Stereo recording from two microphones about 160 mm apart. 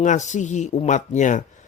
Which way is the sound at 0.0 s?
50° left (ahead or behind).